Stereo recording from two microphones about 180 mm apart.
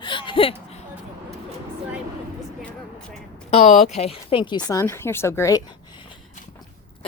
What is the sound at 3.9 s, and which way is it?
Speech, 35° left (ahead or behind).